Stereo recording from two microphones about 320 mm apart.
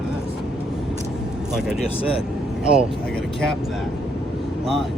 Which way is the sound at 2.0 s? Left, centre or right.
Centre.